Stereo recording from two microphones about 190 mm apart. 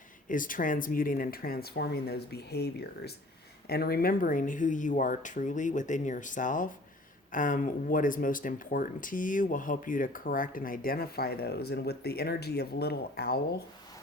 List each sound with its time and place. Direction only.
0.3 s speech: 45° left (ahead or behind)